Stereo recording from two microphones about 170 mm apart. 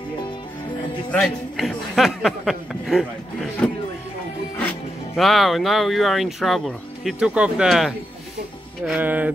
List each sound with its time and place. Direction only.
1.1 s speech: 5° left (ahead or behind)
5.1 s speech: centre (ahead or behind)
8.8 s music: 10° right (ahead or behind)